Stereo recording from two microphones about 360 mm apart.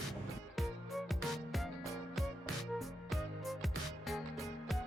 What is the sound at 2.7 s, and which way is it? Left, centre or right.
Music, centre.